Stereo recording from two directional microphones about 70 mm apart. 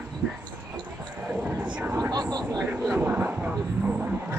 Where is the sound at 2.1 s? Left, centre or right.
Right.